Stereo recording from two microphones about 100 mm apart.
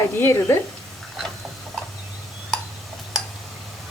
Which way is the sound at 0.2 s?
25° left (ahead or behind).